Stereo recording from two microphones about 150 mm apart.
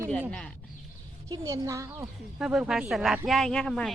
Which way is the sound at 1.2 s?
20° right (ahead or behind).